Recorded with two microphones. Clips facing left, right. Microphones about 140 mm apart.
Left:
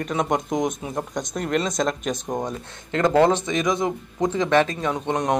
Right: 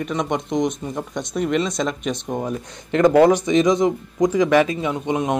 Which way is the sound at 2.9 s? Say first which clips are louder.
Right 4 dB; 15° right (ahead or behind).